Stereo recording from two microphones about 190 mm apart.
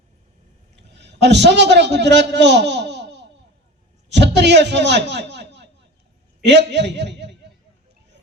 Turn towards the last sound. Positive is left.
turn(degrees=-65)  # may be behind; listen again after turning